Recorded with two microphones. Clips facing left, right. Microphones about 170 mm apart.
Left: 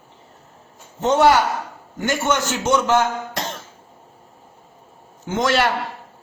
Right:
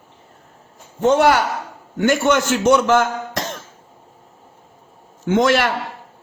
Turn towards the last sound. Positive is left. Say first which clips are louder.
# right 4 dB
turn(degrees=-55)  # may be behind; listen again after turning